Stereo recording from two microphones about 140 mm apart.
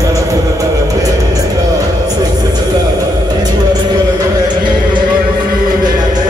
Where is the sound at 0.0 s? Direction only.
25° right (ahead or behind).